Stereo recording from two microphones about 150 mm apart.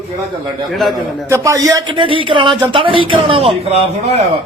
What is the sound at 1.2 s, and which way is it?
A man's voice, 20° right (ahead or behind).